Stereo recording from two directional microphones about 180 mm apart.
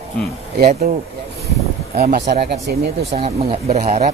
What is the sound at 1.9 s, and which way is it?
Speech, 60° right (ahead or behind).